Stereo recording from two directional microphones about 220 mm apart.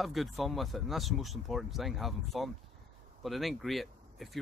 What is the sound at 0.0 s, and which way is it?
Speech, centre (ahead or behind).